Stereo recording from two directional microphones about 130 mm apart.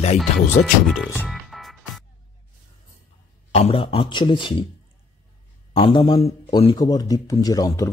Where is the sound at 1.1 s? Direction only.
Centre (ahead or behind).